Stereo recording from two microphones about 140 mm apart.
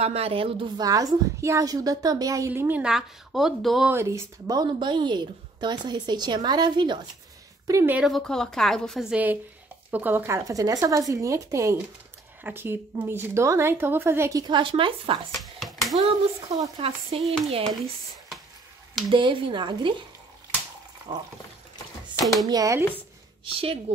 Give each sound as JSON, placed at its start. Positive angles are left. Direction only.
{"t": 0.0, "sound": "a woman's voice", "side_deg": -45}
{"t": 0.8, "sound": "a woman's voice", "side_deg": -25}
{"t": 3.9, "sound": "a woman's voice", "side_deg": -20}
{"t": 7.6, "sound": "a woman's voice", "side_deg": -20}
{"t": 7.9, "sound": "a woman's voice", "side_deg": 0}
{"t": 9.1, "sound": "a woman's voice", "side_deg": -10}
{"t": 14.4, "sound": "a woman's voice", "side_deg": -35}
{"t": 15.3, "sound": "finger snapping", "side_deg": 0}
{"t": 16.5, "sound": "a woman's voice", "side_deg": -25}
{"t": 17.2, "sound": "a woman's voice", "side_deg": 0}
{"t": 19.0, "sound": "a woman's voice", "side_deg": -35}
{"t": 22.2, "sound": "speech", "side_deg": 0}
{"t": 22.5, "sound": "a woman's voice", "side_deg": -25}
{"t": 23.4, "sound": "a woman's voice", "side_deg": -40}